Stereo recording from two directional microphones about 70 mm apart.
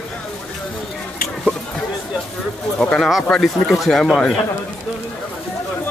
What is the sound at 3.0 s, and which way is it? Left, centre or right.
A man's voice, centre.